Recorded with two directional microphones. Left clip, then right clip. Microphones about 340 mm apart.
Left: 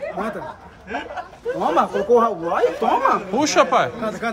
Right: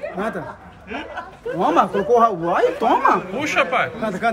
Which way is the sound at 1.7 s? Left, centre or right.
Right.